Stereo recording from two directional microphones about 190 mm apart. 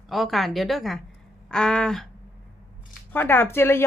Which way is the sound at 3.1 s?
10° left (ahead or behind).